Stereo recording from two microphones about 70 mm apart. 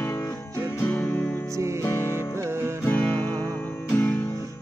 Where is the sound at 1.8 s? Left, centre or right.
Left.